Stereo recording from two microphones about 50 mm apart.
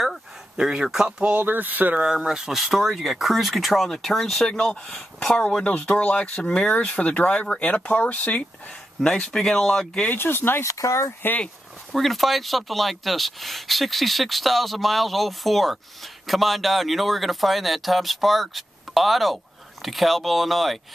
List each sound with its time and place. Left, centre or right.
0.6 s speech: centre
1.4 s speech: right
2.0 s speech: centre
5.7 s speech: left
9.0 s speech: centre
10.1 s speech: left
10.6 s speech: left
11.9 s speech: centre